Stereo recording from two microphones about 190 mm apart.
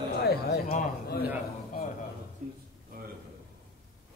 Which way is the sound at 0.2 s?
55° left (ahead or behind).